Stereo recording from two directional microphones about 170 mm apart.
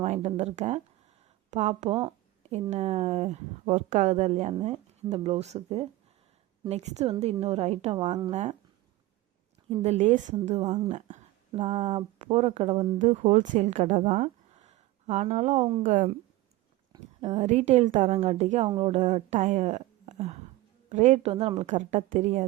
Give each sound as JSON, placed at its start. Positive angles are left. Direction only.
{"t": 0.0, "sound": "speech", "side_deg": -40}
{"t": 9.8, "sound": "a woman's voice", "side_deg": -40}
{"t": 13.0, "sound": "a woman's voice", "side_deg": -45}
{"t": 17.2, "sound": "a woman's voice", "side_deg": -40}